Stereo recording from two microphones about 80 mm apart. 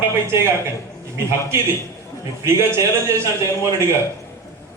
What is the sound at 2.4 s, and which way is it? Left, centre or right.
Speech, right.